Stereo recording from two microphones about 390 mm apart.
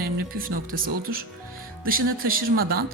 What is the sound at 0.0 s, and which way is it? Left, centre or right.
Speech, right.